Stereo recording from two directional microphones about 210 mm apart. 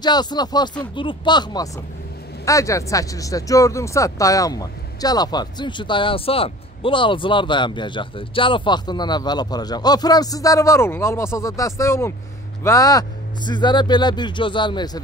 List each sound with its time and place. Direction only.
0.0 s speech: 20° left (ahead or behind)